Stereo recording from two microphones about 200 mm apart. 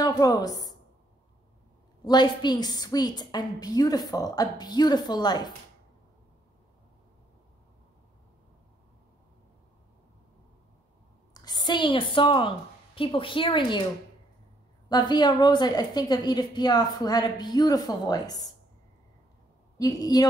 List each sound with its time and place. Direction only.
0.0 s a woman's voice: 20° left (ahead or behind)
2.0 s a woman's voice: 20° left (ahead or behind)
11.3 s a woman's voice: 20° left (ahead or behind)
14.9 s a woman's voice: 20° left (ahead or behind)
19.8 s a woman's voice: 20° left (ahead or behind)